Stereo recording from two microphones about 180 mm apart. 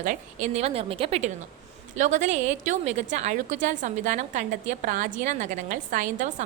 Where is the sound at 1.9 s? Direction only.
45° right (ahead or behind).